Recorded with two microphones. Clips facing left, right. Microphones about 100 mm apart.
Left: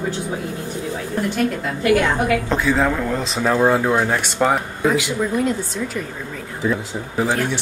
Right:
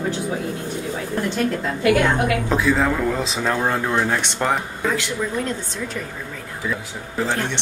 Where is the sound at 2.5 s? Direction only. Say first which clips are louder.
Left 1 dB; centre (ahead or behind).